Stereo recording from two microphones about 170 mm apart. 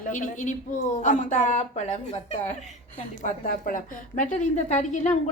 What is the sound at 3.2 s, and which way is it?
A woman's voice, 55° left (ahead or behind).